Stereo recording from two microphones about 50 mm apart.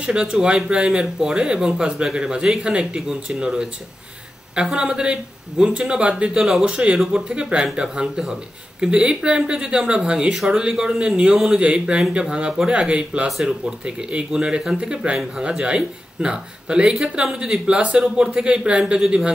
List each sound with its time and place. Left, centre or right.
0.0 s speech: centre
10.3 s speech: centre